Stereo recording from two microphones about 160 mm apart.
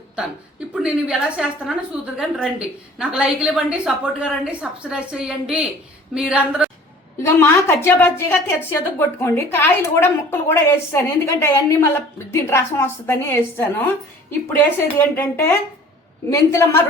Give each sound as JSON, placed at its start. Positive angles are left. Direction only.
{"t": 0.7, "sound": "a woman's voice", "side_deg": -5}
{"t": 7.2, "sound": "a woman's voice", "side_deg": 15}